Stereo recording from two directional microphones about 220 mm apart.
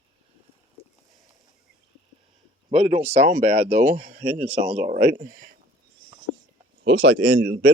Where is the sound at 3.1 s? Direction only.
30° right (ahead or behind).